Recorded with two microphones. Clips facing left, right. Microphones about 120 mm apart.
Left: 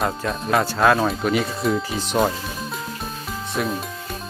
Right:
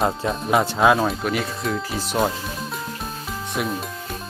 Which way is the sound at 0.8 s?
5° right (ahead or behind).